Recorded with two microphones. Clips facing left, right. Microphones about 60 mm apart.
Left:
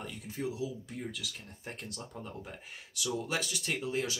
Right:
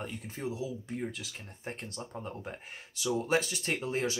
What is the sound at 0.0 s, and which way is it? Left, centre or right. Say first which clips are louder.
Speech: even; right.